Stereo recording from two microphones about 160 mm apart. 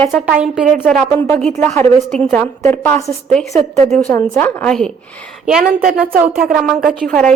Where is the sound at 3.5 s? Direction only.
45° right (ahead or behind).